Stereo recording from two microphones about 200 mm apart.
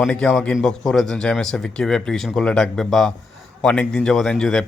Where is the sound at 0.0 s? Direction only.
5° left (ahead or behind).